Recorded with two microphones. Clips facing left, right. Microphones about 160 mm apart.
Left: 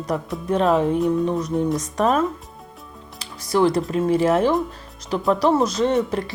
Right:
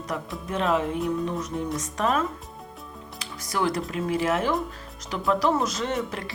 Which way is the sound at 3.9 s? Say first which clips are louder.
Left 7 dB; 35° left (ahead or behind).